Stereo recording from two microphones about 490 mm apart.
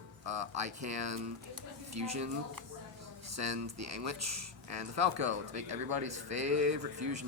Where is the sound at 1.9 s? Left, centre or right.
Right.